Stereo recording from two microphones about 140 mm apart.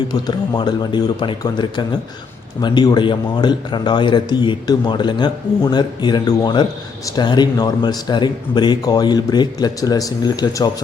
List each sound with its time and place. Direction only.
0.1 s speech: 30° left (ahead or behind)